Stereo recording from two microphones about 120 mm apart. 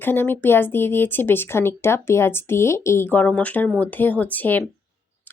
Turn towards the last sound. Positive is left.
turn(degrees=15)  # may be behind; listen again after turning